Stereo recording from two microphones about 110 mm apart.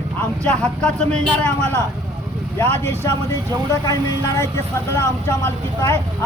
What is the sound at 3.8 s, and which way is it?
Speech, 30° left (ahead or behind).